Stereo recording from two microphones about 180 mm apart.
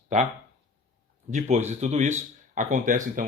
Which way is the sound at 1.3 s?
40° right (ahead or behind).